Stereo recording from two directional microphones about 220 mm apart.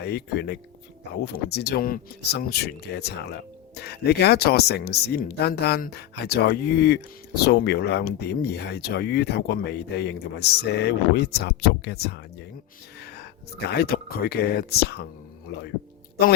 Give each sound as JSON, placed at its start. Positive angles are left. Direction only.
{"t": 0.0, "sound": "speech", "side_deg": 50}
{"t": 13.0, "sound": "a sound", "side_deg": 45}
{"t": 13.7, "sound": "speech", "side_deg": 45}